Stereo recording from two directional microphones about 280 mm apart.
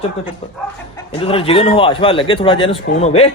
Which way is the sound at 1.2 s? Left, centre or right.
Centre.